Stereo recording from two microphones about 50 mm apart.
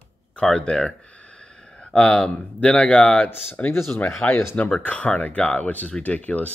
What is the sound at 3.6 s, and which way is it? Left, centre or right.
Speech, left.